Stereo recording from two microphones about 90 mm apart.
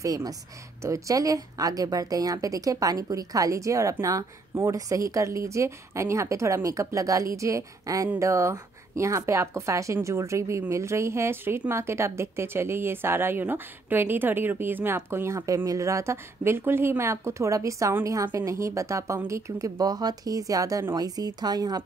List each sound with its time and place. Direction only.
0.0 s a woman's voice: 40° right (ahead or behind)